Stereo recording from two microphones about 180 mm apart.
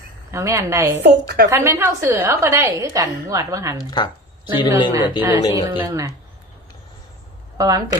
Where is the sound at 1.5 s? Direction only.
15° right (ahead or behind).